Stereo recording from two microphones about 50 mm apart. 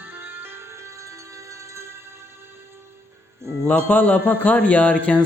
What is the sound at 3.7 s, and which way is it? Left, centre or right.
Speech, left.